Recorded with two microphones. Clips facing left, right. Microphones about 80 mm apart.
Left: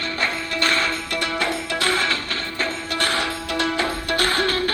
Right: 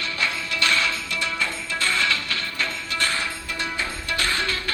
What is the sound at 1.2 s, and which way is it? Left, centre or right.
Music, left.